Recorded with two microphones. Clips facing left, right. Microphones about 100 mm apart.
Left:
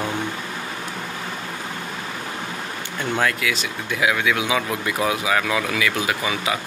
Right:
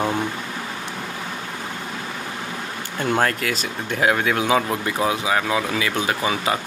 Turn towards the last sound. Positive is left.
turn(degrees=-35)  # may be behind; listen again after turning